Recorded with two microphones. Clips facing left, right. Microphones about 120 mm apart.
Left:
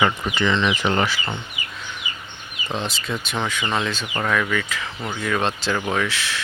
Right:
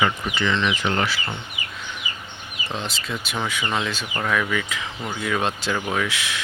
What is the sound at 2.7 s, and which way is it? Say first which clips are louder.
Speech: left 3 dB; centre (ahead or behind).